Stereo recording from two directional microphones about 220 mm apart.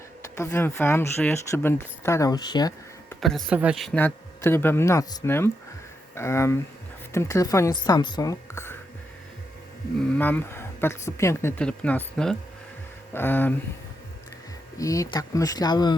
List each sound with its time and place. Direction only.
0.3 s speech: 15° left (ahead or behind)
3.2 s speech: centre (ahead or behind)
10.2 s speech: 10° left (ahead or behind)
14.8 s speech: 15° left (ahead or behind)